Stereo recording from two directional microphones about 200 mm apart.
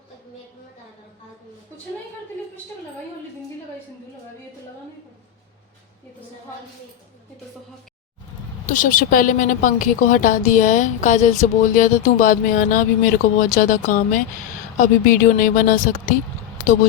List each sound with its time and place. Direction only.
8.6 s a woman's voice: 40° left (ahead or behind)